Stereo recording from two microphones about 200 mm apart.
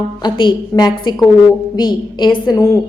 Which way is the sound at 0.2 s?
20° left (ahead or behind).